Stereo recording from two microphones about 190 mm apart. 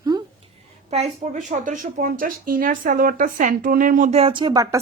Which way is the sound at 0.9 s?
35° right (ahead or behind).